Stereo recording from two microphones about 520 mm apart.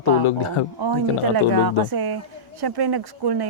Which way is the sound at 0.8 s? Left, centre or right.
Right.